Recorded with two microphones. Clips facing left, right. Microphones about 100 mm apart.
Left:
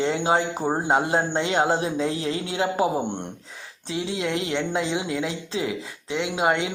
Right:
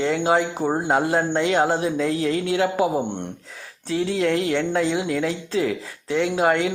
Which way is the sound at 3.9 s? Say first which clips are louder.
Right 5 dB; 20° left (ahead or behind).